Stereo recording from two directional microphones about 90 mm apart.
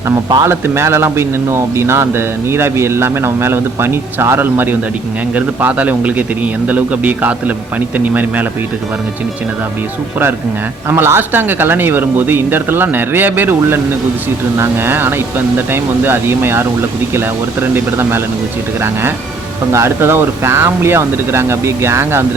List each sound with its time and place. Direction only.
0.4 s a man's voice: 25° right (ahead or behind)
10.8 s a man's voice: 30° right (ahead or behind)
19.7 s a man's voice: 30° right (ahead or behind)